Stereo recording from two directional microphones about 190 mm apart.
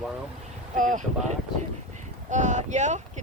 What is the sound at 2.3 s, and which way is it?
Speech, 40° right (ahead or behind).